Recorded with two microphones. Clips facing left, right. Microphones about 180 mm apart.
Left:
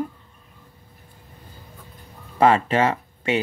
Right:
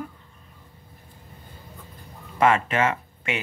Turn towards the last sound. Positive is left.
turn(degrees=35)  # may be behind; listen again after turning